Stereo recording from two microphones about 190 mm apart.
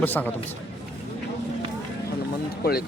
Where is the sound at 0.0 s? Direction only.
10° left (ahead or behind).